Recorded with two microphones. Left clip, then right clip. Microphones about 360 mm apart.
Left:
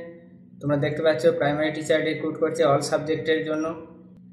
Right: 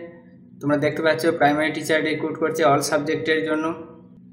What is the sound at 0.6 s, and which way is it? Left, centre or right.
Speech, centre.